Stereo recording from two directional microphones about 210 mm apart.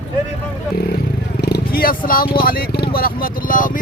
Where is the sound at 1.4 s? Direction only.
45° left (ahead or behind).